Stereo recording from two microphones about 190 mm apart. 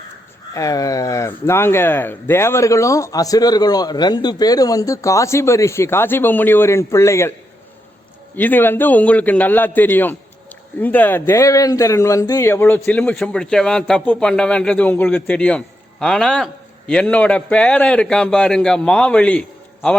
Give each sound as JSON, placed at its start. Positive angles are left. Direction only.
{"t": 0.5, "sound": "speech", "side_deg": 15}
{"t": 8.4, "sound": "speech", "side_deg": 10}